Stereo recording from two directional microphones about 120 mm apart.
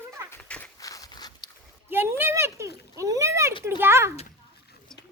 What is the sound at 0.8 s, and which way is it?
Walk, 30° left (ahead or behind).